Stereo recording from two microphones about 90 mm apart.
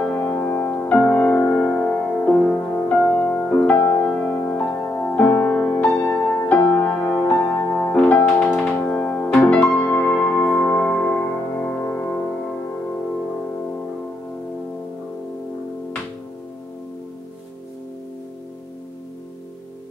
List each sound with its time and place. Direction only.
0.0 s music: 15° left (ahead or behind)